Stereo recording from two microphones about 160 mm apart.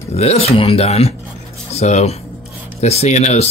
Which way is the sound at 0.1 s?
40° left (ahead or behind).